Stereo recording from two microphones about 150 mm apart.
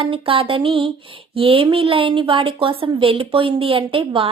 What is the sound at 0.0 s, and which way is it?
A woman's voice, 35° right (ahead or behind).